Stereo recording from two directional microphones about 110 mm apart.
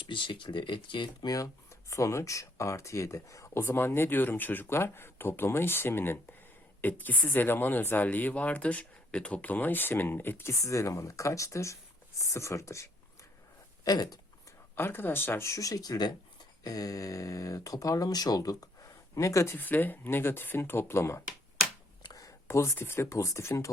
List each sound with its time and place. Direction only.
0.1 s speech: 50° left (ahead or behind)
1.3 s speech: 30° left (ahead or behind)
13.8 s a sound: 35° left (ahead or behind)
14.8 s speech: 20° left (ahead or behind)
19.5 s speech: 15° left (ahead or behind)